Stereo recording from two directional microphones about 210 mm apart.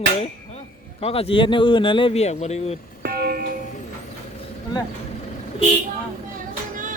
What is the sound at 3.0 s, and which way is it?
Music, 45° right (ahead or behind).